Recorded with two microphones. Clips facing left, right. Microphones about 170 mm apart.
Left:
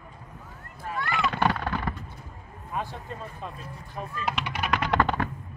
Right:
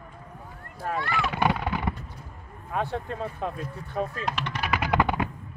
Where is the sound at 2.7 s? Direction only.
60° right (ahead or behind).